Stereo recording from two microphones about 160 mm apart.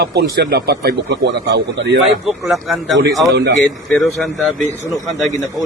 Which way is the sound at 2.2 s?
Centre (ahead or behind).